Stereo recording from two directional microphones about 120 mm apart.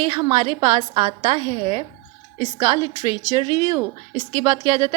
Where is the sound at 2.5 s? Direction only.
35° right (ahead or behind).